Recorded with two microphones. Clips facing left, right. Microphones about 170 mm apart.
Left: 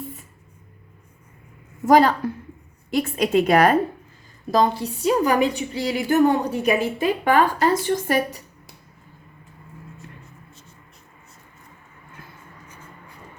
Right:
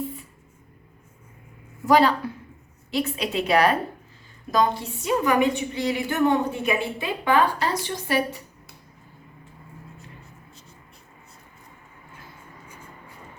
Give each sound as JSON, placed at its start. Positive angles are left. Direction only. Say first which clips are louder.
{"t": 1.9, "sound": "a woman's voice", "louder": "left 3 dB", "side_deg": 45}
{"t": 4.5, "sound": "a woman's voice", "louder": "left 3 dB", "side_deg": 35}